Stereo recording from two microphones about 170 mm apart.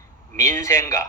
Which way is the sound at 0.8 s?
20° left (ahead or behind).